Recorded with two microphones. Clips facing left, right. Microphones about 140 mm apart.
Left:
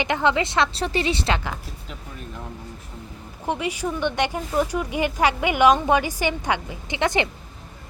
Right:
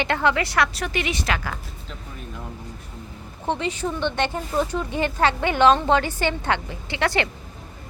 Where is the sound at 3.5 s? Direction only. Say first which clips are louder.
Even; 10° left (ahead or behind).